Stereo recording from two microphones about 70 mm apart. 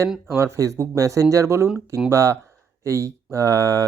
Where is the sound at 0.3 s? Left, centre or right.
Right.